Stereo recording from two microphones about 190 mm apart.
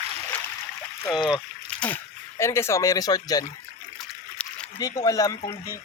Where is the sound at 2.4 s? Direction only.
15° left (ahead or behind).